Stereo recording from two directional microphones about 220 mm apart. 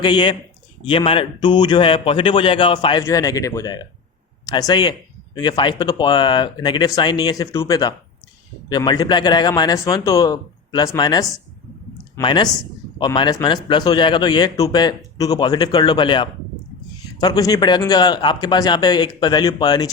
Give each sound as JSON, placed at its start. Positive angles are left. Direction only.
{"t": 0.0, "sound": "speech", "side_deg": 20}